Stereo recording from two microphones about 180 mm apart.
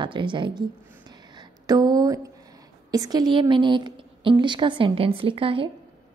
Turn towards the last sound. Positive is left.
turn(degrees=-30)  # may be behind; listen again after turning